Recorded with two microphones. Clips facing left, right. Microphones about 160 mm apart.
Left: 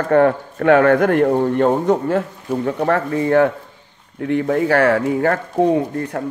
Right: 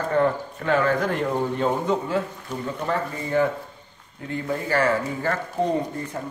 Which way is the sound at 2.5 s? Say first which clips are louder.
Left 13 dB; 70° left (ahead or behind).